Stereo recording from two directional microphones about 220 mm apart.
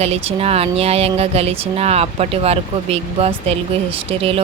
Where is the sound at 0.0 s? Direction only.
25° right (ahead or behind).